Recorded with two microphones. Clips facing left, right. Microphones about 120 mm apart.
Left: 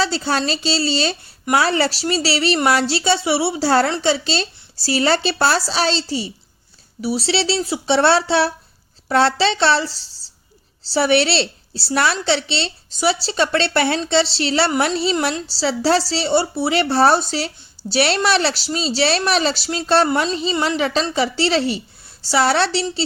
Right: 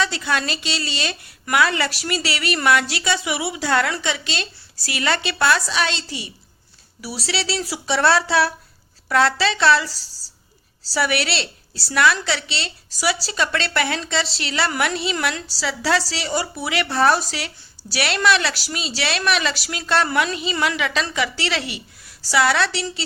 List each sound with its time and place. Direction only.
0.0 s a woman's voice: 30° left (ahead or behind)